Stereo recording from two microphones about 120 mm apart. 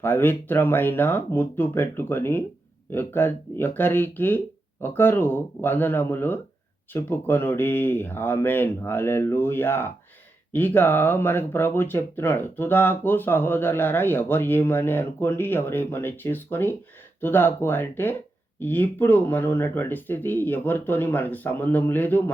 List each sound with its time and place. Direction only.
0.0 s speech: 15° left (ahead or behind)